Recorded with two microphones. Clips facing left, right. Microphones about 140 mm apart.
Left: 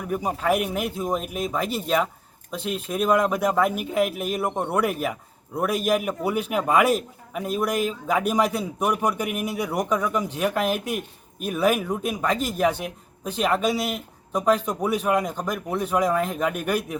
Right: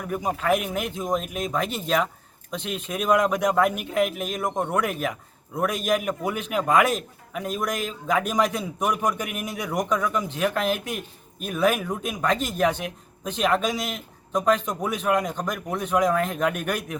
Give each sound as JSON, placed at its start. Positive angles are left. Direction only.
{"t": 0.1, "sound": "speech", "side_deg": 10}